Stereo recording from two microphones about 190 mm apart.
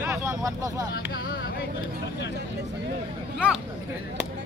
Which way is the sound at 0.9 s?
55° left (ahead or behind).